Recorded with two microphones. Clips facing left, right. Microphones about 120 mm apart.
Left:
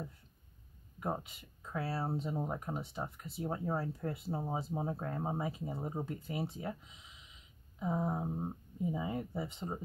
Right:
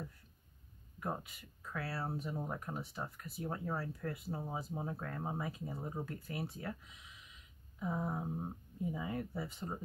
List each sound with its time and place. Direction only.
0.9 s speech: 20° left (ahead or behind)